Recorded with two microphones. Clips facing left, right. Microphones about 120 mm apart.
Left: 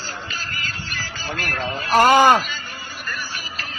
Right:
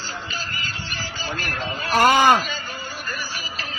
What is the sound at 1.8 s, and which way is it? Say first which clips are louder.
Speech: left 3 dB; 35° left (ahead or behind).